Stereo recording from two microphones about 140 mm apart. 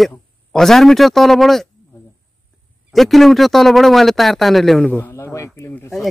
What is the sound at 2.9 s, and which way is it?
A man's voice, centre (ahead or behind).